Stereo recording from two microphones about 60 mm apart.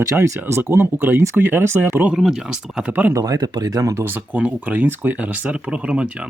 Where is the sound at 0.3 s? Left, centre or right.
Right.